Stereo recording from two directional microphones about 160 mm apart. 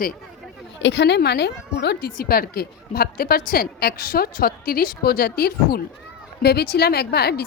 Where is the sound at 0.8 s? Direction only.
90° left; by 5.8 s 75° left (ahead or behind).